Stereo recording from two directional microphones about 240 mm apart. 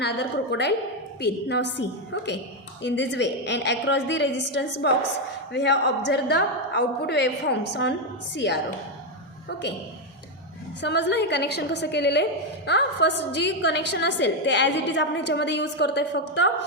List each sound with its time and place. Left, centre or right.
0.0 s a woman's voice: left
10.8 s a woman's voice: left